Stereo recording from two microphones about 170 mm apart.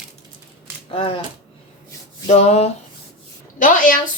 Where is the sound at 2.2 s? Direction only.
40° left (ahead or behind).